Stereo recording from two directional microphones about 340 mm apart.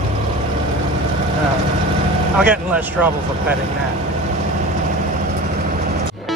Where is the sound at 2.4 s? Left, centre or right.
Centre.